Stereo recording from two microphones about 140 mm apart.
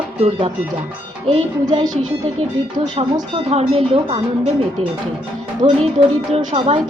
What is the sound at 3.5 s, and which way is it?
Music, 50° right (ahead or behind).